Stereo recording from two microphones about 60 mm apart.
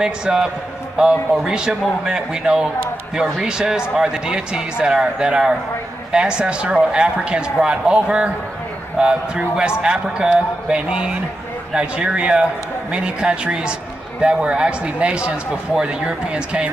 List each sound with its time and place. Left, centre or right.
0.0 s a man's voice: centre